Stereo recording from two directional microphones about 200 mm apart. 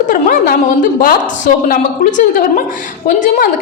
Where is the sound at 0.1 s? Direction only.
45° left (ahead or behind).